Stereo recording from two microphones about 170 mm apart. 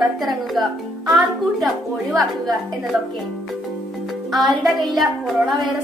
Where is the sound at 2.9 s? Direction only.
Centre (ahead or behind).